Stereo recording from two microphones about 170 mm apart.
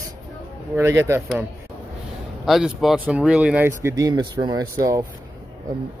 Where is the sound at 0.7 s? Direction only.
15° right (ahead or behind).